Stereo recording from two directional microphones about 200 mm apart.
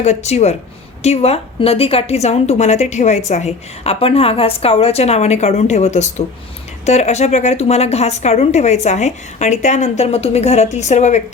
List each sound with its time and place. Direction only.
0.0 s a woman's voice: 35° left (ahead or behind)